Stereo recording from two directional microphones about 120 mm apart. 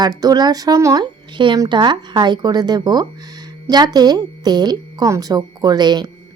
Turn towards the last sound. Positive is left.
turn(degrees=-35)  # may be behind; listen again after turning